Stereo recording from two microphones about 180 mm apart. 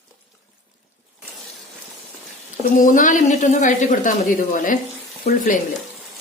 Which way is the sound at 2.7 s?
45° left (ahead or behind).